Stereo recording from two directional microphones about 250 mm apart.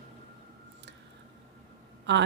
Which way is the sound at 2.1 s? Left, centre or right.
Right.